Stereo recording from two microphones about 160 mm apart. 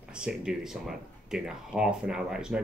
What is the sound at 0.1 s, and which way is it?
Speech, 5° right (ahead or behind).